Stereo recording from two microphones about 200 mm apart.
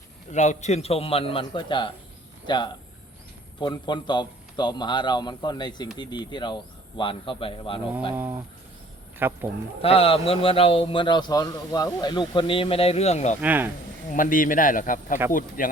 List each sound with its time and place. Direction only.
0.3 s a man's voice: 35° left (ahead or behind)
8.1 s speech: 10° right (ahead or behind)
9.8 s a man's voice: 30° left (ahead or behind)
13.4 s speech: 10° right (ahead or behind)
14.1 s a man's voice: 45° left (ahead or behind)